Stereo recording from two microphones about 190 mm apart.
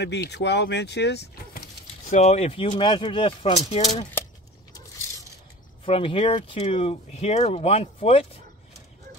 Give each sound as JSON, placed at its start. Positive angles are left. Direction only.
{"t": 0.0, "sound": "speech", "side_deg": 65}
{"t": 2.0, "sound": "speech", "side_deg": 35}
{"t": 5.9, "sound": "speech", "side_deg": 30}